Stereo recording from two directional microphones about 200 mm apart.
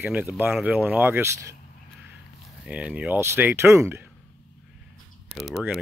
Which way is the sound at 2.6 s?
5° right (ahead or behind).